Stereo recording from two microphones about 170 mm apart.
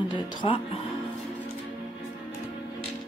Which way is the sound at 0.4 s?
30° left (ahead or behind).